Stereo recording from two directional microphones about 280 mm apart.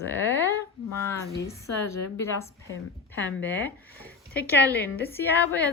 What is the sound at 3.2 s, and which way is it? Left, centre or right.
A woman's voice, centre.